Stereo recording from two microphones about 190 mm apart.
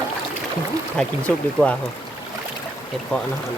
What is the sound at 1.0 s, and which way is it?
Speech, 5° left (ahead or behind).